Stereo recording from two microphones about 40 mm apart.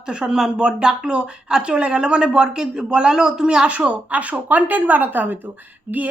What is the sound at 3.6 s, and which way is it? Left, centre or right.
A woman's voice, right.